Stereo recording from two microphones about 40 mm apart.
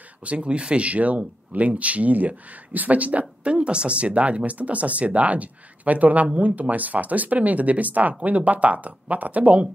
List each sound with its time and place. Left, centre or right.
0.2 s speech: right